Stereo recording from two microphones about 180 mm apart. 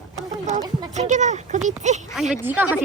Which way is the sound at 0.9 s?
40° right (ahead or behind).